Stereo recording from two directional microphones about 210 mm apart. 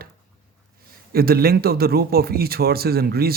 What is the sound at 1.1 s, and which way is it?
Speech, 45° right (ahead or behind).